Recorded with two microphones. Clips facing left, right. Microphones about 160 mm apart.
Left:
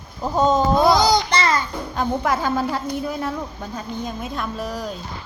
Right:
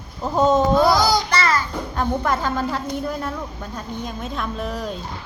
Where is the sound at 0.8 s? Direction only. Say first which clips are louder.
Left 1 dB; 20° left (ahead or behind).